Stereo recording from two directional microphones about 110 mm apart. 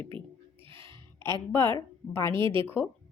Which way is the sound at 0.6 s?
20° left (ahead or behind).